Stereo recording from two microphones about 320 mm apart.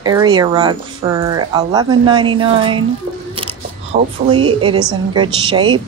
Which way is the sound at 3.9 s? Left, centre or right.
Right.